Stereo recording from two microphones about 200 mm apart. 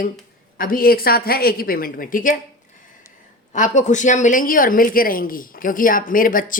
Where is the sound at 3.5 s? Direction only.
40° left (ahead or behind).